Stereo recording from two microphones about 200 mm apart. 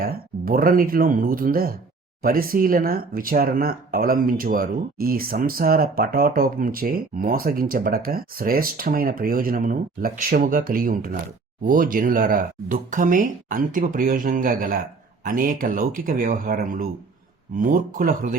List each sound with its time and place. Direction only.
0.0 s speech: 45° right (ahead or behind)